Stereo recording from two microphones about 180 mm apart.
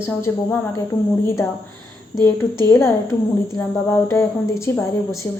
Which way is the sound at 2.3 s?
15° left (ahead or behind).